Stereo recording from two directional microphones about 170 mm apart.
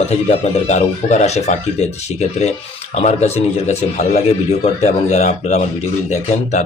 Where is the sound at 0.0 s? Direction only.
40° left (ahead or behind).